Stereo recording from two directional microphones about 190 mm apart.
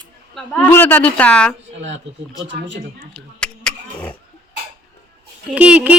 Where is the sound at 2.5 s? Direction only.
70° right (ahead or behind).